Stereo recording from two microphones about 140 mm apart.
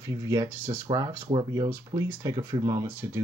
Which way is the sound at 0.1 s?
25° right (ahead or behind).